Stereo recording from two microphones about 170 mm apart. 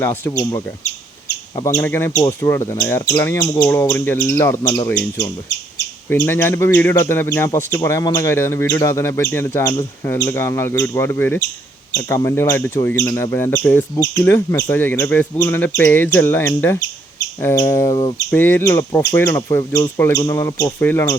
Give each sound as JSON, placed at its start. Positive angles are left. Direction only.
{"t": 0.0, "sound": "speech", "side_deg": 15}
{"t": 6.2, "sound": "speech", "side_deg": 15}